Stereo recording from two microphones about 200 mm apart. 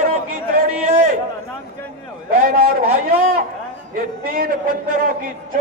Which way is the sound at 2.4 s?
45° right (ahead or behind).